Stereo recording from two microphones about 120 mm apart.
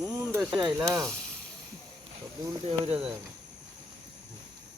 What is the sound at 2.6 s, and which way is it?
Speech, 60° right (ahead or behind).